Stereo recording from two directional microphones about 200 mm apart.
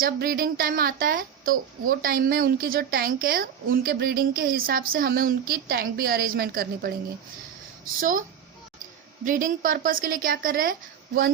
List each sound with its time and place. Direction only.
0.0 s a woman's voice: 50° right (ahead or behind)
7.9 s a woman's voice: 45° right (ahead or behind)
9.2 s a woman's voice: 40° right (ahead or behind)